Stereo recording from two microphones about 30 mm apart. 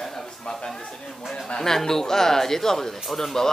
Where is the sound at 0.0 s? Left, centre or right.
Centre.